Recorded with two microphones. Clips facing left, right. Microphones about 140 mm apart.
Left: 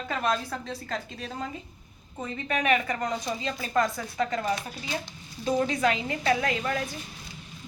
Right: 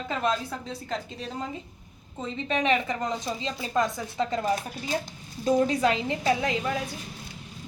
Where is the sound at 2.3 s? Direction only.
25° right (ahead or behind).